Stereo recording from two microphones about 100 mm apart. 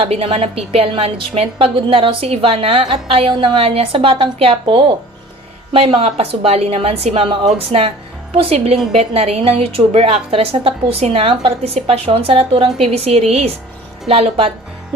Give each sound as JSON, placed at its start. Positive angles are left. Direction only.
{"t": 0.0, "sound": "a woman's voice", "side_deg": -75}
{"t": 6.0, "sound": "a woman's voice", "side_deg": -85}
{"t": 7.1, "sound": "a woman's voice", "side_deg": -65}
{"t": 8.3, "sound": "a woman's voice", "side_deg": -90}
{"t": 14.1, "sound": "a woman's voice", "side_deg": -75}